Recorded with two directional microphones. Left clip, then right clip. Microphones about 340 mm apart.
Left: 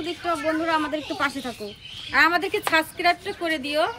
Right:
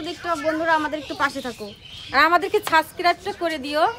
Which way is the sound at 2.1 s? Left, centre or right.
Centre.